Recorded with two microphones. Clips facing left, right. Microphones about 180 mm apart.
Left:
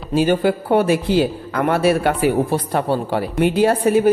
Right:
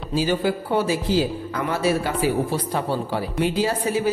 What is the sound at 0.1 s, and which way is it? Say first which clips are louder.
A man's voice: left 6 dB; 60° left (ahead or behind).